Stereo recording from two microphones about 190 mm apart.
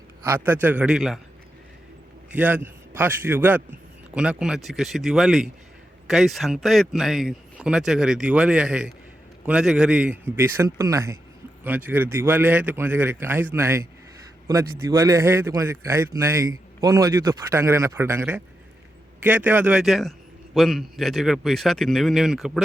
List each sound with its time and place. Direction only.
0.3 s a man's voice: 10° right (ahead or behind)
2.3 s a man's voice: 10° right (ahead or behind)